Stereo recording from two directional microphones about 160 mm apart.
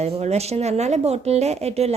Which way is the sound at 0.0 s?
40° right (ahead or behind).